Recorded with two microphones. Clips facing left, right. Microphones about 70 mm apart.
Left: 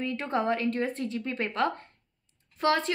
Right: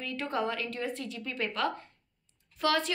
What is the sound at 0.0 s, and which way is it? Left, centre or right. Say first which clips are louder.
A woman's voice: left 4 dB; left.